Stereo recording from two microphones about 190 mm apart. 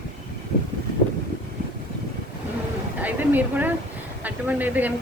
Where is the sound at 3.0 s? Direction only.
10° right (ahead or behind).